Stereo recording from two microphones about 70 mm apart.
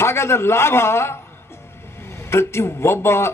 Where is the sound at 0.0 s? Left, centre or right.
Left.